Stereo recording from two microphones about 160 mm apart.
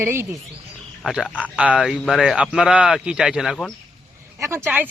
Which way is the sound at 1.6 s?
5° right (ahead or behind).